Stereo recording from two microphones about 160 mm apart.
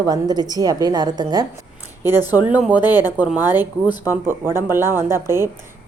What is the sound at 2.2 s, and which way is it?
A woman's voice, 10° right (ahead or behind).